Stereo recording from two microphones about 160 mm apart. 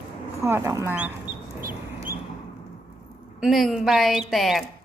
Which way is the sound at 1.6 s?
60° right (ahead or behind).